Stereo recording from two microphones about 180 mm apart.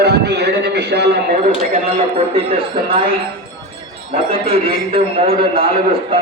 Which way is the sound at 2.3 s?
30° right (ahead or behind).